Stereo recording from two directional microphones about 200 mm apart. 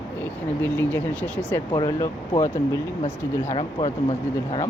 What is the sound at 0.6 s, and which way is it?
Speech, 10° left (ahead or behind).